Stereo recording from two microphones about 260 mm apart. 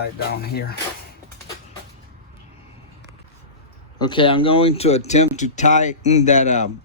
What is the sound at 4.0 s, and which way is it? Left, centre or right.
Speech, centre.